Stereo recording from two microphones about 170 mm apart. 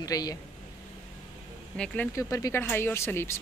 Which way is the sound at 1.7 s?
5° left (ahead or behind).